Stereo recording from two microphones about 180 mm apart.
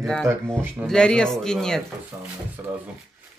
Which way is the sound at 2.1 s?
10° right (ahead or behind).